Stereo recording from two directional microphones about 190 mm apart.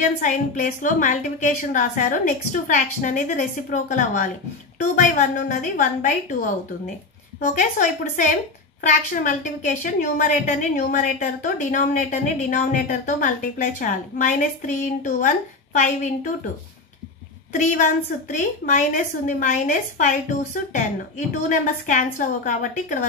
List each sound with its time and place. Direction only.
0.0 s a woman's voice: 40° left (ahead or behind)
17.6 s a woman's voice: 40° left (ahead or behind)
21.8 s a woman's voice: 40° left (ahead or behind)